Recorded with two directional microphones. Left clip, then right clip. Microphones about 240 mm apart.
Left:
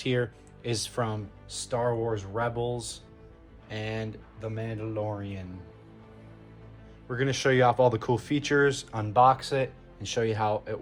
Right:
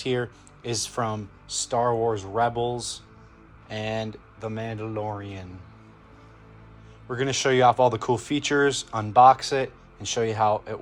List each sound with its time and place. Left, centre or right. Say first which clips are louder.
0.0 s speech: right 2 dB; centre
7.1 s speech: right 3 dB; centre